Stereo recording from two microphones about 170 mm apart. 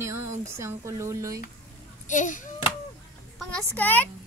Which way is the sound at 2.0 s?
50° left (ahead or behind).